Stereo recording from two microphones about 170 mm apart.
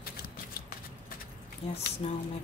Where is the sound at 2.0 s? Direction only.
35° left (ahead or behind).